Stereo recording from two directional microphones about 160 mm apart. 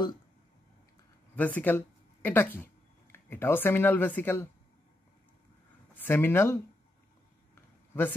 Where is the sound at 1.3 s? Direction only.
10° left (ahead or behind).